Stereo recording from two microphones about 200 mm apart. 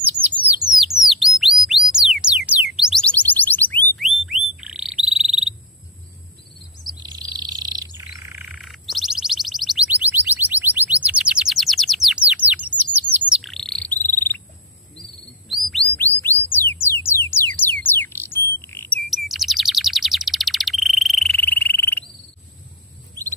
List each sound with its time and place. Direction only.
0.2 s bird: 45° right (ahead or behind)
0.7 s bird: centre (ahead or behind)
1.9 s music: 5° right (ahead or behind)
4.0 s a sound: centre (ahead or behind)
4.6 s frog: 5° right (ahead or behind)
7.0 s bird: 20° right (ahead or behind); by 14.4 s 10° left (ahead or behind)
15.9 s bird: 10° left (ahead or behind)
19.0 s bird: centre (ahead or behind)